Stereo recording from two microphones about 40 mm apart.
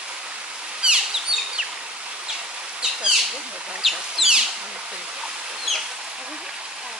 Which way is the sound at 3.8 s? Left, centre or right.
Centre.